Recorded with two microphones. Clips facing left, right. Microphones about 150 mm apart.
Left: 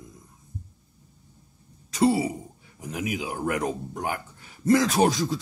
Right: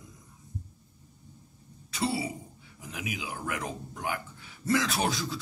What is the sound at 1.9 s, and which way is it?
Speech, 40° left (ahead or behind).